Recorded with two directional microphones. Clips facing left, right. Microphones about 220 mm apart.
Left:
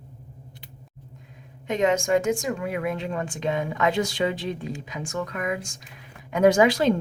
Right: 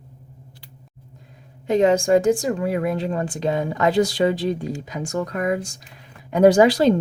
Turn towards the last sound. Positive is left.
turn(degrees=-35)  # may be behind; listen again after turning